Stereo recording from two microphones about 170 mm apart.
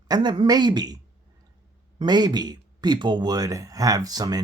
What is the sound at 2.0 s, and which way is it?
Speech, 25° right (ahead or behind).